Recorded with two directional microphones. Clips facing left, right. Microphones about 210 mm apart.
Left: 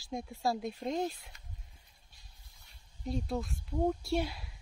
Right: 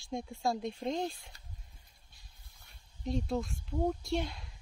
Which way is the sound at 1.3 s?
30° right (ahead or behind).